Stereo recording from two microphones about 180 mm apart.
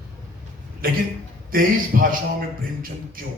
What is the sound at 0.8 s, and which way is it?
A man's voice, 55° right (ahead or behind).